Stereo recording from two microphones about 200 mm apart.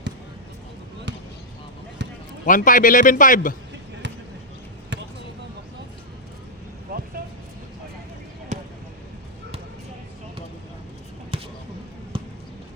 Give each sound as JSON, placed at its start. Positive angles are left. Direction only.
{"t": 2.5, "sound": "a man's voice", "side_deg": 40}
{"t": 4.9, "sound": "basketball bounce", "side_deg": -60}
{"t": 11.3, "sound": "basketball bounce", "side_deg": -25}